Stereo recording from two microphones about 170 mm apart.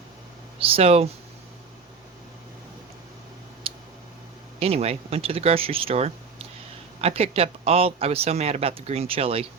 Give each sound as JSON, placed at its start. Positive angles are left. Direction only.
{"t": 0.6, "sound": "speech", "side_deg": -35}
{"t": 3.6, "sound": "tick", "side_deg": -35}
{"t": 4.6, "sound": "speech", "side_deg": -35}